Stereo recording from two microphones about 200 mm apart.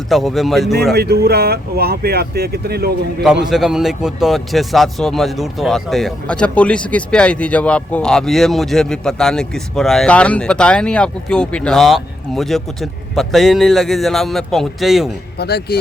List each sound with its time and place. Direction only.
0.1 s speech: centre (ahead or behind)
0.9 s speech: 50° right (ahead or behind)
3.5 s speech: centre (ahead or behind)
15.4 s speech: 55° left (ahead or behind)